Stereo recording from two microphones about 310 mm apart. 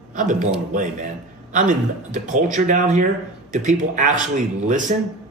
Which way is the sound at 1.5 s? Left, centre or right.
Right.